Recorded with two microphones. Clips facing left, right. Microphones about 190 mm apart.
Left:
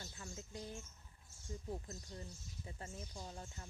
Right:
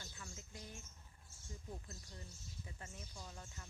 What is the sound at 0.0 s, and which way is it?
Bird, 30° left (ahead or behind).